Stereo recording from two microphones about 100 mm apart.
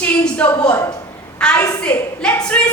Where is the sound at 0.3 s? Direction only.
15° left (ahead or behind).